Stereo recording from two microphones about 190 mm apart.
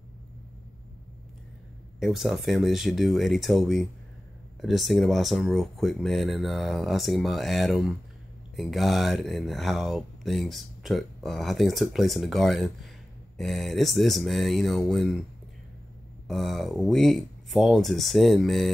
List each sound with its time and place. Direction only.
2.0 s speech: centre (ahead or behind)
16.3 s speech: centre (ahead or behind)